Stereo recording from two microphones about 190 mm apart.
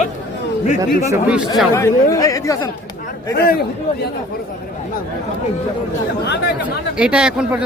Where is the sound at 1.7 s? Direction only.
15° left (ahead or behind).